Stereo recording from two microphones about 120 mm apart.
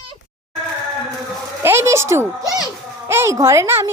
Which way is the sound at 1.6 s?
20° right (ahead or behind).